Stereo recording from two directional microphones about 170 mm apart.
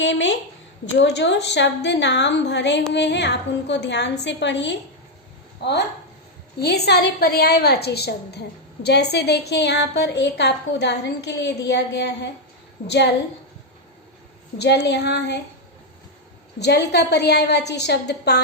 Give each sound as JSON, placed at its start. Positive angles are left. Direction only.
{"t": 0.0, "sound": "a woman's voice", "side_deg": 90}
{"t": 14.6, "sound": "a woman's voice", "side_deg": 85}
{"t": 16.6, "sound": "a woman's voice", "side_deg": 80}